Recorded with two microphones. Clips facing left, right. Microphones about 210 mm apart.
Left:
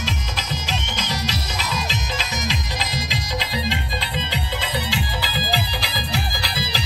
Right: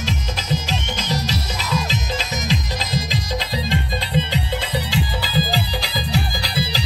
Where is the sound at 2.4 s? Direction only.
45° right (ahead or behind).